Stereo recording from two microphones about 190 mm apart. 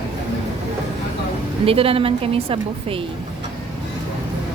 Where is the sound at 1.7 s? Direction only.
30° right (ahead or behind).